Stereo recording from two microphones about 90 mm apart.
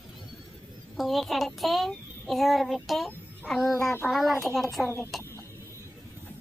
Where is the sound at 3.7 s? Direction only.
35° left (ahead or behind).